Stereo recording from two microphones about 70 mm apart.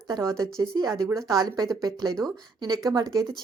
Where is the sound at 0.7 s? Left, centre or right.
Right.